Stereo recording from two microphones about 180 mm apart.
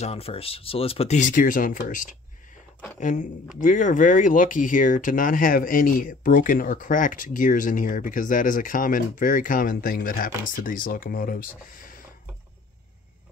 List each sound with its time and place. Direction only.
0.0 s speech: 35° left (ahead or behind); by 12.0 s 50° left (ahead or behind)